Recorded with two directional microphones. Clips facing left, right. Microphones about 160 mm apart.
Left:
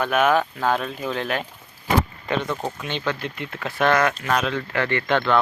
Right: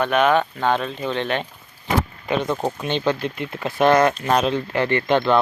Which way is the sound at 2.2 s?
15° right (ahead or behind).